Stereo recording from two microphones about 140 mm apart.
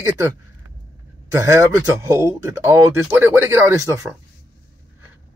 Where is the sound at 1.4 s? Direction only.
20° right (ahead or behind).